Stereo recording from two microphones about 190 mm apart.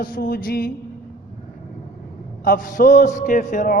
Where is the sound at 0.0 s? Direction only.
50° left (ahead or behind).